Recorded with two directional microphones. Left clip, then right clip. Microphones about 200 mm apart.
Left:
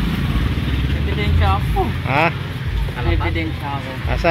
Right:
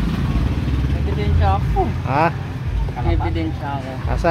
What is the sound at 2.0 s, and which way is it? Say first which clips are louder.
Speech: left 1 dB; centre (ahead or behind).